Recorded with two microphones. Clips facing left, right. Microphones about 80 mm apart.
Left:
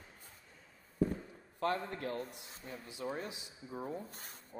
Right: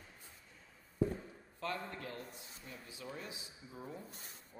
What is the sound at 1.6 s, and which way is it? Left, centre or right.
A man's voice, left.